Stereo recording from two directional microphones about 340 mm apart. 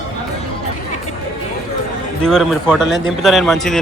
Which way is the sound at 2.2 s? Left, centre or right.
Centre.